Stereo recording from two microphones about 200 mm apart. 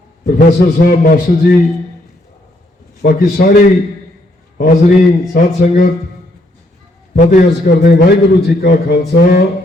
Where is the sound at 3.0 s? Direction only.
45° left (ahead or behind).